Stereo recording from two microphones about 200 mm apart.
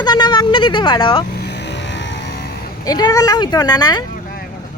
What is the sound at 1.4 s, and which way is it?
Vehicle, 55° left (ahead or behind).